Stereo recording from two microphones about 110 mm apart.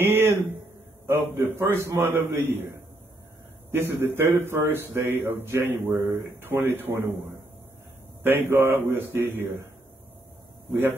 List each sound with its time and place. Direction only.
0.0 s a sound: 20° right (ahead or behind)
1.0 s a man's voice: 20° right (ahead or behind)
3.7 s a man's voice: 20° right (ahead or behind)